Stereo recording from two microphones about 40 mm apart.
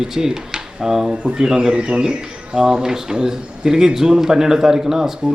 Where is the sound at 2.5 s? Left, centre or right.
Centre.